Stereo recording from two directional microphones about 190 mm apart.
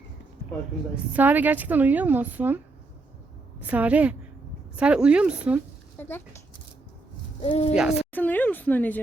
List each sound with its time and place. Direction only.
1.1 s a woman's voice: 10° right (ahead or behind)
3.6 s a woman's voice: 10° right (ahead or behind)
6.0 s speech: 10° left (ahead or behind)
7.4 s speech: 30° left (ahead or behind)
7.8 s a woman's voice: 5° right (ahead or behind)
8.1 s speech: 10° left (ahead or behind)